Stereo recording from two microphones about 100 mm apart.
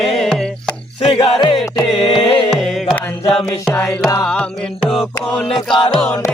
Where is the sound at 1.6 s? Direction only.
Centre (ahead or behind).